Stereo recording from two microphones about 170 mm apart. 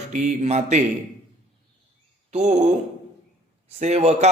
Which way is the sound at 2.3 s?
40° right (ahead or behind).